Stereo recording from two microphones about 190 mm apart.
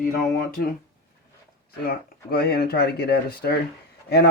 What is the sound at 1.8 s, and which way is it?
Speech, 55° left (ahead or behind).